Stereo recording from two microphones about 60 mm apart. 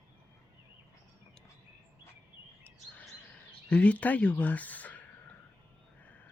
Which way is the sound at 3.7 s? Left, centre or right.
Left.